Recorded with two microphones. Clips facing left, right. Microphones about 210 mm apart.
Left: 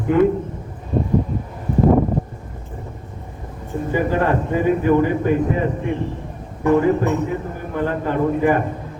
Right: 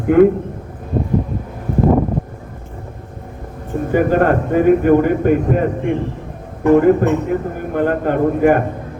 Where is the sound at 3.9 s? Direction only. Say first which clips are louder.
Right 5 dB; 50° right (ahead or behind).